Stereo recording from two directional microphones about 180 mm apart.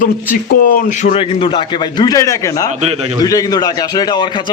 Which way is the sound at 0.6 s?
45° left (ahead or behind).